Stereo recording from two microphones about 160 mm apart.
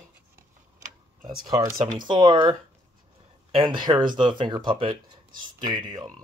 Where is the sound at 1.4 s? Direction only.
25° right (ahead or behind).